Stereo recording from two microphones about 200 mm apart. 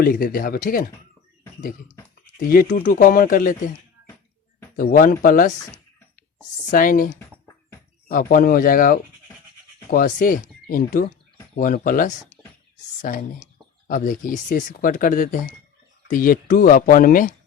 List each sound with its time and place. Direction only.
0.0 s speech: 45° left (ahead or behind)
2.4 s speech: 45° left (ahead or behind)
4.8 s speech: 45° left (ahead or behind)